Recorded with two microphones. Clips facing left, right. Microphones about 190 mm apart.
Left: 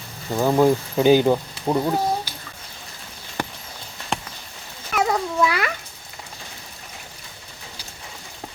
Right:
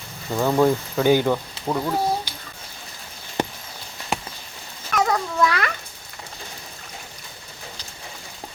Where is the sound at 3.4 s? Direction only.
20° right (ahead or behind).